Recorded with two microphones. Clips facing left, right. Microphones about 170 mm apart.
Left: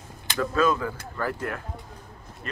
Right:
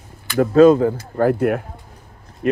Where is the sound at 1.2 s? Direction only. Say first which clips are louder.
Right 13 dB; 60° right (ahead or behind).